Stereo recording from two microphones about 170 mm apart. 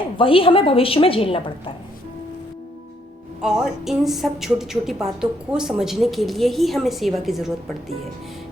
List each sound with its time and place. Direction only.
0.2 s a woman's voice: 30° left (ahead or behind)
3.4 s a woman's voice: 5° right (ahead or behind)